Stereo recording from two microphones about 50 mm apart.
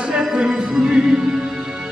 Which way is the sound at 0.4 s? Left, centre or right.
Centre.